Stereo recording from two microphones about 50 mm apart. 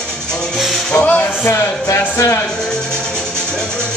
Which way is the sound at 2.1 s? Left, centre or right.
Left.